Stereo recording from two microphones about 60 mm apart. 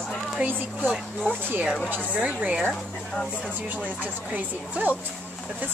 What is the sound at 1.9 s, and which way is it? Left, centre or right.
Speech, right.